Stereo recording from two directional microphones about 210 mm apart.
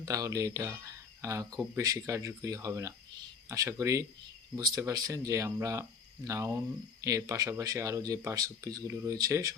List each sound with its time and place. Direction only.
0.0 s speech: 15° right (ahead or behind)